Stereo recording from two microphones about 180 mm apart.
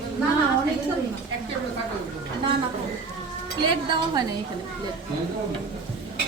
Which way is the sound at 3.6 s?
25° right (ahead or behind).